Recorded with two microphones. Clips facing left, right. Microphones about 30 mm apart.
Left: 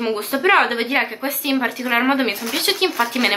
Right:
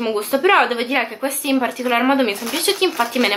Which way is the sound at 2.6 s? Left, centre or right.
Centre.